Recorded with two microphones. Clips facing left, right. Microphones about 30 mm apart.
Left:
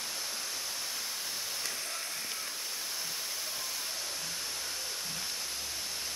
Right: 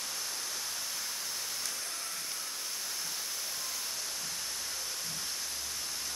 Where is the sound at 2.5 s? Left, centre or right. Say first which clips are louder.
Left 1 dB; centre.